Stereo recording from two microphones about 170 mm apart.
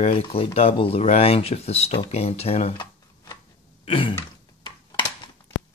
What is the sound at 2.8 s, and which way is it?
Shuffling cards, 20° left (ahead or behind).